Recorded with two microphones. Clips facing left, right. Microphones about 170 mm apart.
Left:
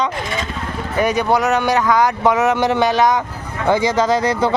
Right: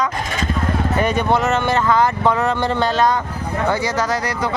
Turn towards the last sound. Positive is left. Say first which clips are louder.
# left 5 dB
turn(degrees=25)  # may be behind; listen again after turning